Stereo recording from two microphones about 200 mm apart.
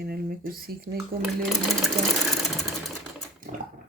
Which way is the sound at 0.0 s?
50° right (ahead or behind).